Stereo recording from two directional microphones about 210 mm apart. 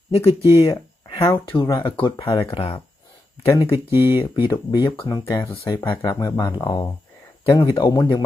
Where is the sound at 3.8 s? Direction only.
10° right (ahead or behind).